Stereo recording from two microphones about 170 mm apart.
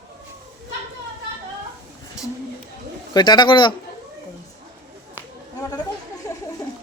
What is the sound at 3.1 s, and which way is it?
Speech, 25° left (ahead or behind).